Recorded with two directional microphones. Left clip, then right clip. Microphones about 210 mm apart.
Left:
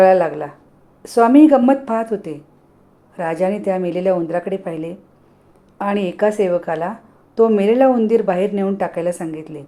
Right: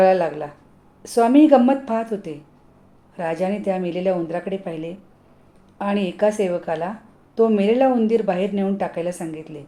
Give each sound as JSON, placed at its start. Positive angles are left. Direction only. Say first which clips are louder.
{"t": 0.0, "sound": "speech", "louder": "left 4 dB", "side_deg": 15}